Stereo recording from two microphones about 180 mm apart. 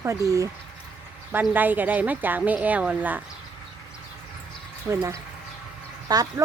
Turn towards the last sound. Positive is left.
turn(degrees=-20)  # may be behind; listen again after turning